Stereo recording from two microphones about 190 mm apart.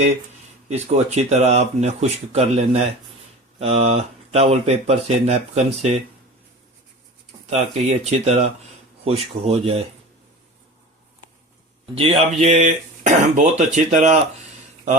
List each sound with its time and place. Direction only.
0.7 s speech: 35° right (ahead or behind)
7.5 s speech: 35° right (ahead or behind)
11.9 s speech: 35° right (ahead or behind)